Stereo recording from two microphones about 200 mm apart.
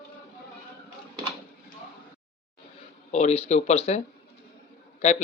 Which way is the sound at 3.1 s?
35° left (ahead or behind).